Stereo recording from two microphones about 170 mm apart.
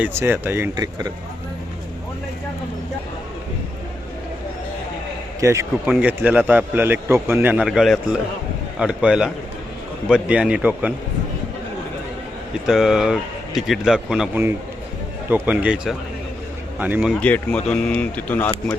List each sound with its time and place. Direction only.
0.0 s a man's voice: 15° right (ahead or behind)
5.4 s a man's voice: 15° right (ahead or behind)
12.6 s a man's voice: 5° right (ahead or behind)
17.2 s speech: 5° left (ahead or behind)